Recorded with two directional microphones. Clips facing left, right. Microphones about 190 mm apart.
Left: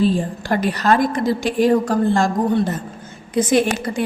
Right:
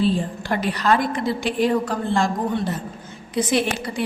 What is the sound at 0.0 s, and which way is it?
A woman's voice, 45° left (ahead or behind).